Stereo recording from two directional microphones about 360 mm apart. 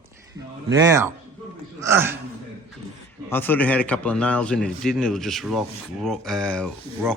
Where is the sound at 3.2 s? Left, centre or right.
Centre.